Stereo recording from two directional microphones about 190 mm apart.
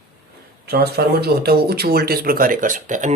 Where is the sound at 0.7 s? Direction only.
55° right (ahead or behind).